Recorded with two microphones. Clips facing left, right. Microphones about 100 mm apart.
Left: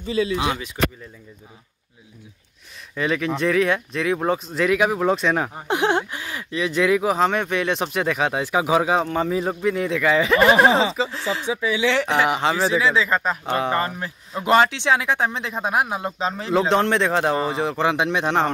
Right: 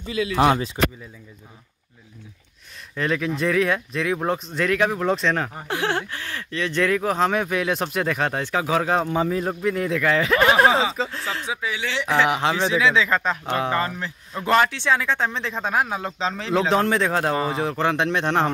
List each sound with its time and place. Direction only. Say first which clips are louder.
0.0 s speech: left 3 dB; 30° left (ahead or behind)
3.0 s speech: left 1 dB; centre (ahead or behind)
9.0 s speech: even; 5° right (ahead or behind)